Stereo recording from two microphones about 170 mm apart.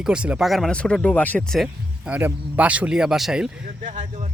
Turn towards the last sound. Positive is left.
turn(degrees=-45)  # may be behind; listen again after turning